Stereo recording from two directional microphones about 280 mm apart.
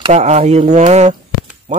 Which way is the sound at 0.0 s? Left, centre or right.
Right.